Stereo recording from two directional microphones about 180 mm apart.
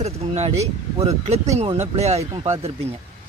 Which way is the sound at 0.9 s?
35° right (ahead or behind).